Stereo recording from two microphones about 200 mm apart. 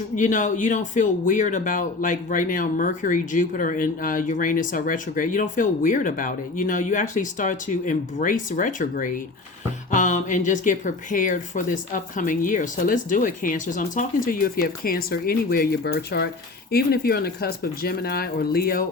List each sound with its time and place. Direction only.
0.2 s speech: 40° left (ahead or behind)